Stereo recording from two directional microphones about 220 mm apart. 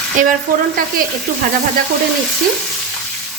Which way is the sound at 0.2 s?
35° right (ahead or behind).